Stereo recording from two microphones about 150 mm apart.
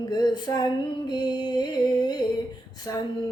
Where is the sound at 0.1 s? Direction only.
30° left (ahead or behind).